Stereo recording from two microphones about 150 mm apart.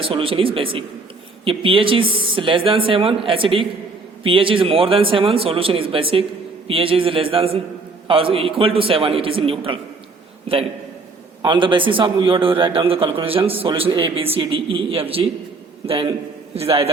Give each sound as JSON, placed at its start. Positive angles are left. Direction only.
{"t": 0.0, "sound": "a man's voice", "side_deg": -35}
{"t": 11.4, "sound": "a man's voice", "side_deg": -35}
{"t": 16.6, "sound": "a man's voice", "side_deg": -40}